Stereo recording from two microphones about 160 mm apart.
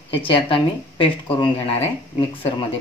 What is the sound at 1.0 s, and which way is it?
Speech, 30° left (ahead or behind).